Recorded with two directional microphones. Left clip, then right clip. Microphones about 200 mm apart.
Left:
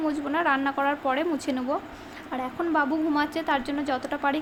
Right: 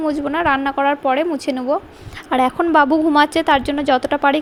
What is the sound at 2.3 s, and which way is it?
A woman's voice, 40° right (ahead or behind).